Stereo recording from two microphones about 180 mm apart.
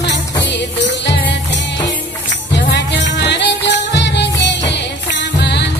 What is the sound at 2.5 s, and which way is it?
Music, 75° left (ahead or behind).